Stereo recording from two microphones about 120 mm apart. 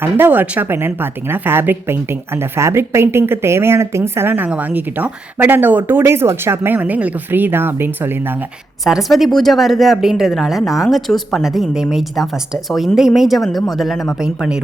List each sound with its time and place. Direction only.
0.0 s a woman's voice: 15° right (ahead or behind)
8.8 s speech: centre (ahead or behind)